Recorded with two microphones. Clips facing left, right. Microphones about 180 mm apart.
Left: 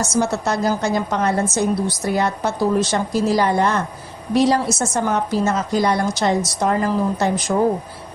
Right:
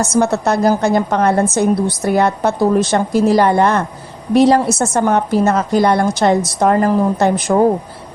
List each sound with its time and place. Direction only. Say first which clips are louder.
0.0 s a woman's voice: right 5 dB; 60° right (ahead or behind)